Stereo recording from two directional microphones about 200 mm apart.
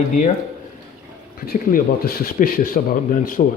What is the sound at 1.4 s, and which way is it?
Speech, 50° left (ahead or behind).